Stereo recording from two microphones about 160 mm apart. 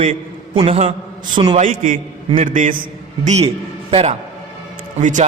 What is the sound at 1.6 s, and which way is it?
A man's voice, 55° right (ahead or behind).